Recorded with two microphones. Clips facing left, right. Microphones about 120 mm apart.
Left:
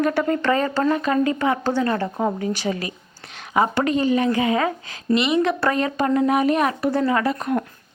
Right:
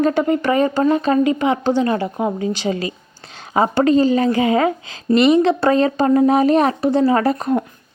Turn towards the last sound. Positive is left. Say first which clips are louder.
# right 5 dB
turn(degrees=-35)  # may be behind; listen again after turning